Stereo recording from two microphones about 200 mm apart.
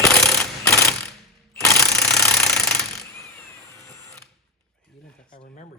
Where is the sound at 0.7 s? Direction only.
15° left (ahead or behind).